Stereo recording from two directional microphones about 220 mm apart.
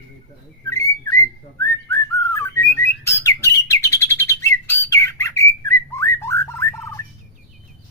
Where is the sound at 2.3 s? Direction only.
10° left (ahead or behind).